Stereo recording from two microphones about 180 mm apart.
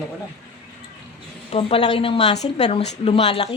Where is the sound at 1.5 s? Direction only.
30° left (ahead or behind).